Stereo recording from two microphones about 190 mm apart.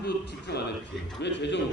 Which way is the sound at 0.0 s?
60° left (ahead or behind).